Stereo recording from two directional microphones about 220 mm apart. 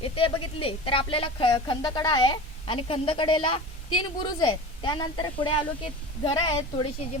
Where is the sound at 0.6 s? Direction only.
25° left (ahead or behind).